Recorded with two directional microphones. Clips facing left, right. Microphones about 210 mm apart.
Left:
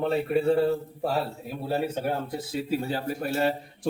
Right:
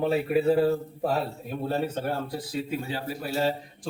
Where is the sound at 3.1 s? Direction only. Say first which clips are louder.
Left 1 dB; 55° left (ahead or behind).